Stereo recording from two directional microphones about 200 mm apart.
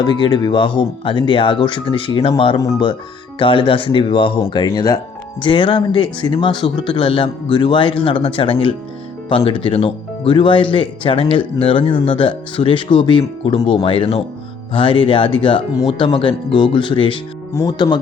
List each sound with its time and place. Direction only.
0.0 s speech: 20° left (ahead or behind)